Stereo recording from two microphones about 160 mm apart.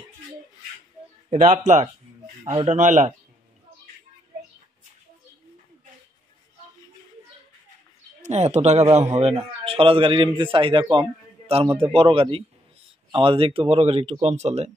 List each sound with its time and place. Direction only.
1.3 s speech: 50° right (ahead or behind)
8.2 s a man's voice: 45° right (ahead or behind)